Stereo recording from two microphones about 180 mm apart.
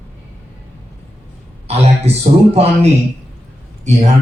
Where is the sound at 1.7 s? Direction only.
35° right (ahead or behind).